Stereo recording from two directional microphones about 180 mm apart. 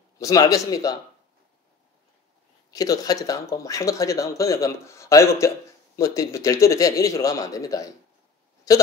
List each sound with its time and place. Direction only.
0.2 s a man's voice: 20° left (ahead or behind)
2.7 s a man's voice: 20° left (ahead or behind)